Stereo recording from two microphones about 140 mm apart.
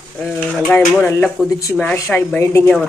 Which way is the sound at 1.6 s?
15° left (ahead or behind).